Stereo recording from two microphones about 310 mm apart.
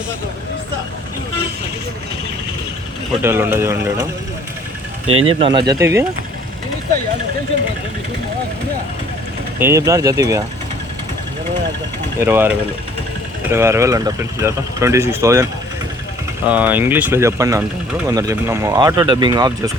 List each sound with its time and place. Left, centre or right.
3.2 s speech: centre
5.0 s speech: centre
9.6 s speech: centre
12.2 s speech: centre
16.5 s speech: centre